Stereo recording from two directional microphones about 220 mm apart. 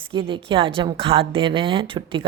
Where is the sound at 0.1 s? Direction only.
20° right (ahead or behind).